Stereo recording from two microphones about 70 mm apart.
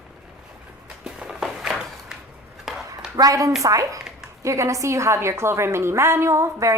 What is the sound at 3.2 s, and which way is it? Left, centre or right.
A woman's voice, right.